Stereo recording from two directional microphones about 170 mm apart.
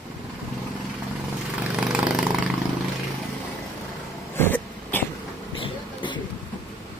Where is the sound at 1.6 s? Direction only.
5° right (ahead or behind).